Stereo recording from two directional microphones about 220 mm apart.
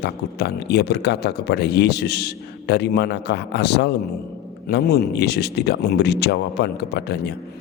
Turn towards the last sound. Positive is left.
turn(degrees=50)  # may be behind; listen again after turning